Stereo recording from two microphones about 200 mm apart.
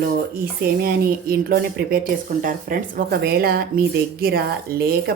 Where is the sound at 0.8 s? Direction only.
50° right (ahead or behind).